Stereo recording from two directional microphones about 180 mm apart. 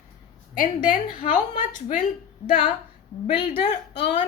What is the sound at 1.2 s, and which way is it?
Speech, 40° left (ahead or behind).